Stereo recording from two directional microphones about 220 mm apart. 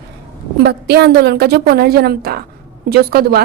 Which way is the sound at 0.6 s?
50° right (ahead or behind).